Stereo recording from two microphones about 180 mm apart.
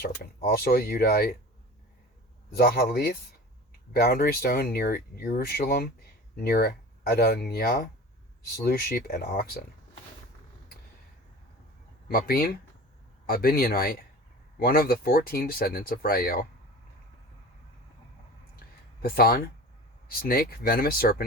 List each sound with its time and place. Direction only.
0.0 s speech: 55° left (ahead or behind)
2.6 s speech: 60° left (ahead or behind)
12.0 s speech: 55° left (ahead or behind)
19.0 s speech: 55° left (ahead or behind)